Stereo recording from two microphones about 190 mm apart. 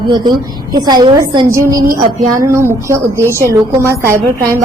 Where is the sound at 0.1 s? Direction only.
20° right (ahead or behind).